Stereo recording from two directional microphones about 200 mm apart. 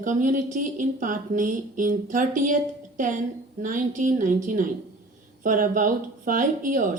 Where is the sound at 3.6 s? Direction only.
40° right (ahead or behind).